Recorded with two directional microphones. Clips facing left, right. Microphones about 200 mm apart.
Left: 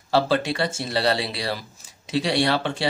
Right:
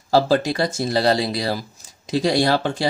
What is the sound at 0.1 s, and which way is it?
Speech, 40° right (ahead or behind).